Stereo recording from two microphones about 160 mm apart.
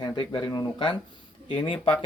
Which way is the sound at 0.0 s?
25° left (ahead or behind).